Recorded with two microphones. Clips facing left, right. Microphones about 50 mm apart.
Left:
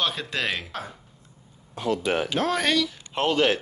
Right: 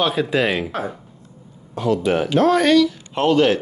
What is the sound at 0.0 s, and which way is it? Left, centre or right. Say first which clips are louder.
Speech: right 9 dB; centre.